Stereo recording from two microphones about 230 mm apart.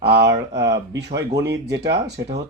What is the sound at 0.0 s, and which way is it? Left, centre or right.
Speech, right.